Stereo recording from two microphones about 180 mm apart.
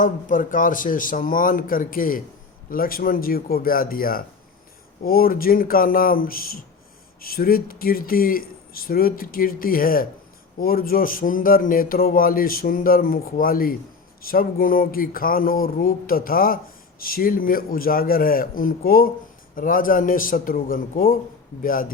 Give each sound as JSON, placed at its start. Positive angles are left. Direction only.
{"t": 0.0, "sound": "speech", "side_deg": 45}